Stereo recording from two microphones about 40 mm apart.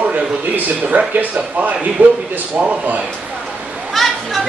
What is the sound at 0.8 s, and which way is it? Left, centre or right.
Speech, right.